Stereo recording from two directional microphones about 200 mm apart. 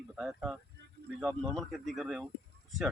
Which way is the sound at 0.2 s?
5° right (ahead or behind).